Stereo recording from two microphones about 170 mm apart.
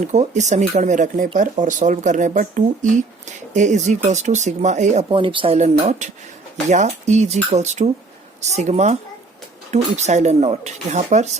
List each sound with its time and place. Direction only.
0.0 s speech: 45° right (ahead or behind)
5.0 s speech: 30° right (ahead or behind)
5.5 s speech: 40° right (ahead or behind)